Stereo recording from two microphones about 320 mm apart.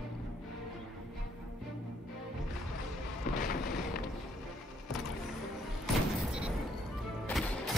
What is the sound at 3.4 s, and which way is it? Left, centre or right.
Music, left.